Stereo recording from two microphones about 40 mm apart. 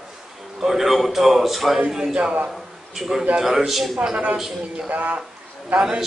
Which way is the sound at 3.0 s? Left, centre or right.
Centre.